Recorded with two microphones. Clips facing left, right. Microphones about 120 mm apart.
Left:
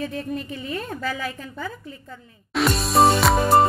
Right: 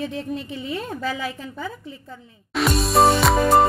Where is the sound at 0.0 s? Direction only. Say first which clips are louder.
Even; 20° right (ahead or behind).